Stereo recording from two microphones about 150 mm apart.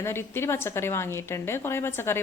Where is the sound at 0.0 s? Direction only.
15° left (ahead or behind).